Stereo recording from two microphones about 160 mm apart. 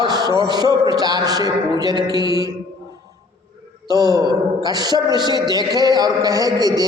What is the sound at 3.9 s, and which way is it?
A man's voice, 25° right (ahead or behind).